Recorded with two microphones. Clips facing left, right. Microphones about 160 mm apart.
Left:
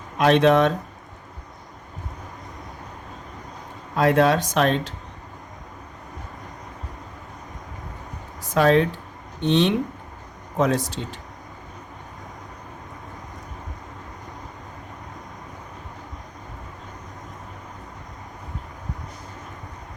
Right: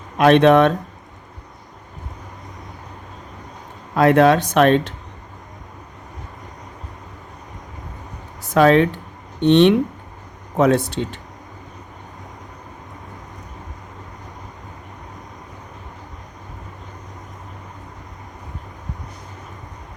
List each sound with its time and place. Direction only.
0.2 s speech: 60° right (ahead or behind)
3.9 s speech: 65° right (ahead or behind)
8.5 s speech: 70° right (ahead or behind)